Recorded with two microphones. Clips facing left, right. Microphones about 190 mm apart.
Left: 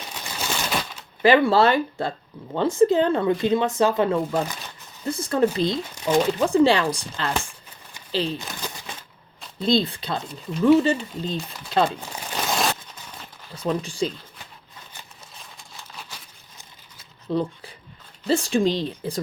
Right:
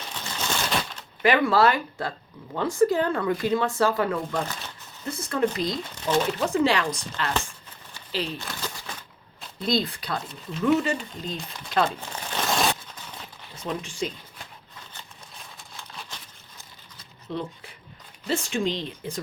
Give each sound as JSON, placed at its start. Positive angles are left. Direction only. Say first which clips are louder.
{"t": 0.1, "sound": "a sound", "louder": "even", "side_deg": 5}
{"t": 1.2, "sound": "speech", "louder": "left 3 dB", "side_deg": 30}
{"t": 8.4, "sound": "crumpling", "louder": "left 1 dB", "side_deg": 15}
{"t": 9.6, "sound": "speech", "louder": "left 4 dB", "side_deg": 25}
{"t": 11.9, "sound": "crumpling", "louder": "left 1 dB", "side_deg": 10}
{"t": 13.6, "sound": "speech", "louder": "left 6 dB", "side_deg": 35}
{"t": 15.5, "sound": "crumpling", "louder": "even", "side_deg": 0}
{"t": 17.2, "sound": "speech", "louder": "left 7 dB", "side_deg": 35}